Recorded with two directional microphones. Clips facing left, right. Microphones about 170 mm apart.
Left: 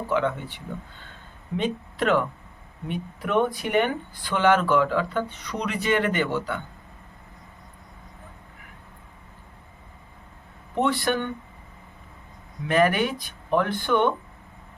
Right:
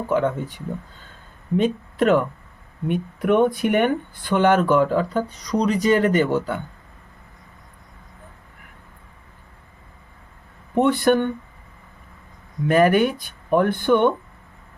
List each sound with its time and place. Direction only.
0.1 s speech: 45° right (ahead or behind)
10.8 s speech: 50° right (ahead or behind)
12.6 s speech: 45° right (ahead or behind)